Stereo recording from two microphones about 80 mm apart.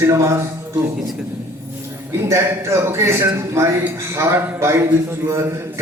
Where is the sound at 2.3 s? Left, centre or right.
Right.